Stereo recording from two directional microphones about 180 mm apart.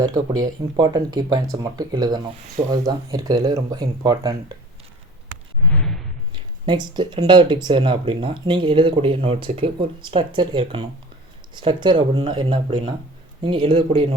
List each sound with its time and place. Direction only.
0.0 s speech: 20° right (ahead or behind)
5.7 s a sound: 5° left (ahead or behind)
6.3 s speech: 25° right (ahead or behind)